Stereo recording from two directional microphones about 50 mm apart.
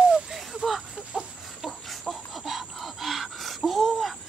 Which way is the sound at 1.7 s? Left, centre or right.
Centre.